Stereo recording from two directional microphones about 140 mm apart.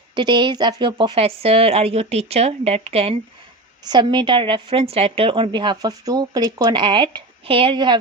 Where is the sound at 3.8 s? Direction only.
30° right (ahead or behind).